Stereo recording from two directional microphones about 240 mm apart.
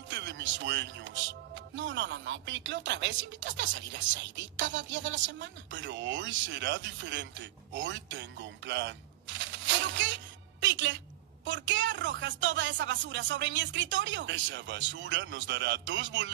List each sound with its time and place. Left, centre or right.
0.1 s a man's voice: right
9.4 s music: right
11.4 s a man's voice: right